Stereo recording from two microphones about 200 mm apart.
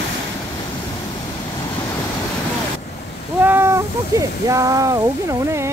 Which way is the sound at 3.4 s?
10° right (ahead or behind).